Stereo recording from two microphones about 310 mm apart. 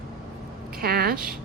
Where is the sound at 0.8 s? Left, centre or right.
Right.